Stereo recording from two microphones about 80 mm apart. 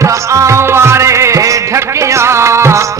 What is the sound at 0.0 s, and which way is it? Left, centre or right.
Music, right.